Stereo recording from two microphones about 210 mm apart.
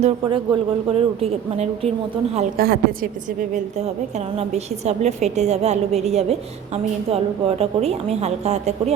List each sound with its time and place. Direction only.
0.0 s a woman's voice: 25° right (ahead or behind)
2.6 s a woman's voice: 45° right (ahead or behind)
3.5 s a woman's voice: 30° right (ahead or behind)